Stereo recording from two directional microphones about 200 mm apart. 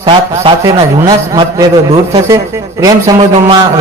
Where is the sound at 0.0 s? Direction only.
25° right (ahead or behind).